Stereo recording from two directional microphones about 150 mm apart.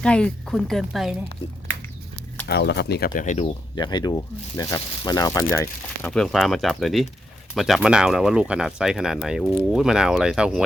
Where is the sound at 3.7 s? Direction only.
30° left (ahead or behind).